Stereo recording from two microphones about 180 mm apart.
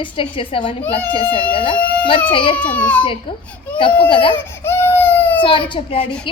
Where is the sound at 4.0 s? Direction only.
30° left (ahead or behind).